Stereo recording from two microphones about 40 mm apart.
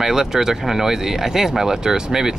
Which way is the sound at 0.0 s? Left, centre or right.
Centre.